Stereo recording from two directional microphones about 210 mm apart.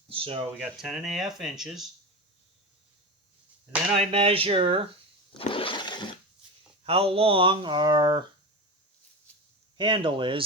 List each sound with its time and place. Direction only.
0.1 s a sound: 25° right (ahead or behind)
0.8 s speech: centre (ahead or behind)
3.7 s speech: 5° right (ahead or behind)
4.1 s speech: 25° right (ahead or behind)
5.4 s a sound: 25° left (ahead or behind)
6.8 s speech: 30° right (ahead or behind)
9.7 s speech: 25° right (ahead or behind)